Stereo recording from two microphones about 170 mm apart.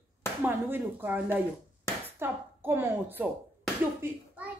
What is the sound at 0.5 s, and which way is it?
A woman's voice, 10° right (ahead or behind).